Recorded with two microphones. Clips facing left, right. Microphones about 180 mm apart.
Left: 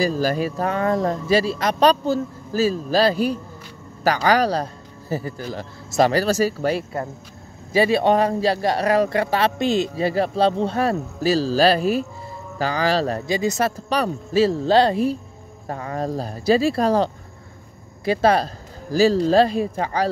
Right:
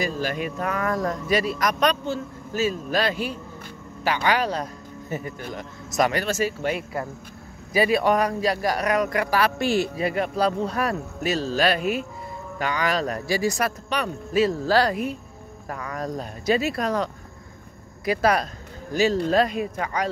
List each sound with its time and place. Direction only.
0.0 s a man's voice: 35° left (ahead or behind)